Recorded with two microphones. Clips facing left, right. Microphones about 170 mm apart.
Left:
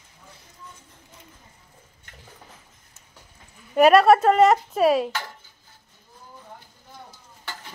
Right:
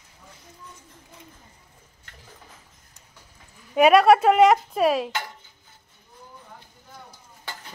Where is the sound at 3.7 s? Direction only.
Centre (ahead or behind).